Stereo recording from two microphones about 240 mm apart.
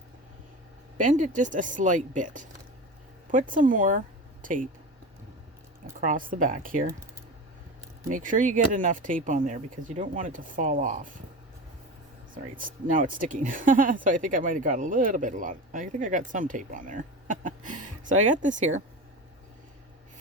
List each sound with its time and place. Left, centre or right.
0.9 s speech: right
6.0 s speech: right
8.1 s speech: right
12.3 s speech: right